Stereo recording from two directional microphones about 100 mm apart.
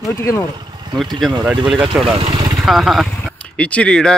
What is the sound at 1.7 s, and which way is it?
Speech, centre (ahead or behind).